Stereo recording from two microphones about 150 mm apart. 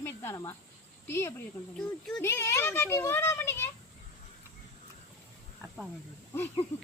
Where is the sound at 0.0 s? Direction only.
15° left (ahead or behind).